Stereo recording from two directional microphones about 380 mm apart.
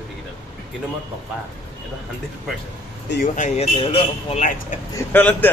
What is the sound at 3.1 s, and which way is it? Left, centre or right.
Speech, left.